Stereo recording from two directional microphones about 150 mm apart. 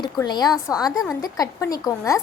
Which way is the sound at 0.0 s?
30° left (ahead or behind).